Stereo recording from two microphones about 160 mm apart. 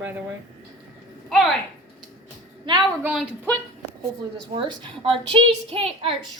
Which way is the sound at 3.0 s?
5° right (ahead or behind).